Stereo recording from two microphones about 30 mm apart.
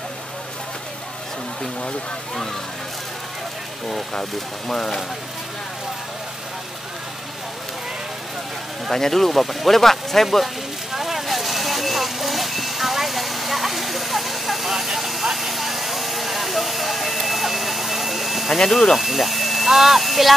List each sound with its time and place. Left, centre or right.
4.1 s speech: centre
8.9 s speech: centre
10.4 s a sound: centre
18.7 s speech: centre
18.9 s speech: centre